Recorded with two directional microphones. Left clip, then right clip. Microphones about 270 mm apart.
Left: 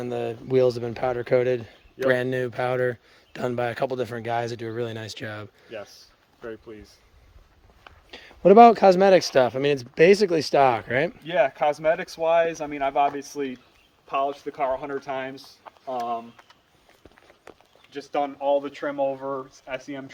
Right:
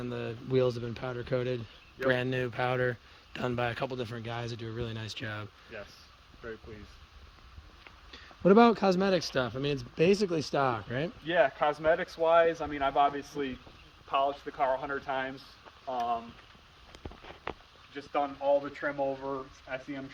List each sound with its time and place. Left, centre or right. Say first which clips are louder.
0.0 s speech: left 9 dB; centre
8.4 s speech: left 10 dB; centre
11.3 s speech: left 3 dB; left
17.9 s speech: left 5 dB; left
19.6 s speech: left 5 dB; left